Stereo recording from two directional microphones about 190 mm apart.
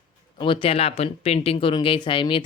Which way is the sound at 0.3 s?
25° left (ahead or behind).